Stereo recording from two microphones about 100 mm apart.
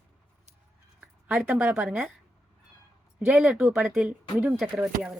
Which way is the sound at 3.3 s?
15° right (ahead or behind).